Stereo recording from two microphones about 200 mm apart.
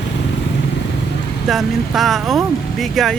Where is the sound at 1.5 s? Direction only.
Centre (ahead or behind).